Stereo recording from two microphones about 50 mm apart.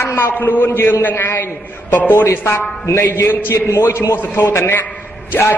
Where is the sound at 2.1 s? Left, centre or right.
Left.